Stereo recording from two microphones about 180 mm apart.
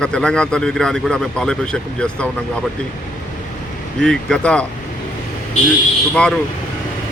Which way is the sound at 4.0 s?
5° left (ahead or behind).